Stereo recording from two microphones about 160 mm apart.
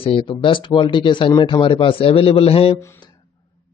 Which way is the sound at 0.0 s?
35° left (ahead or behind).